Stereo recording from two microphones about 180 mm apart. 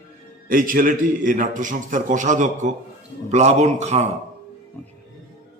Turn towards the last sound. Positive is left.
turn(degrees=-40)  # may be behind; listen again after turning